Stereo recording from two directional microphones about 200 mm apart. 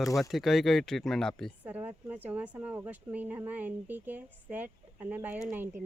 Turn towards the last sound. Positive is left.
turn(degrees=-10)  # may be behind; listen again after turning